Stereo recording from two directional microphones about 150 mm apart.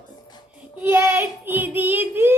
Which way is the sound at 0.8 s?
15° right (ahead or behind).